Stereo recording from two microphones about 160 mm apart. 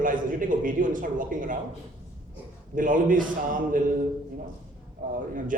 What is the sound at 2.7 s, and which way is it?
A man's voice, 55° right (ahead or behind).